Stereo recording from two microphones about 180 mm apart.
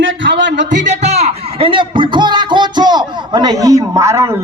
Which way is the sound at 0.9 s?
40° right (ahead or behind).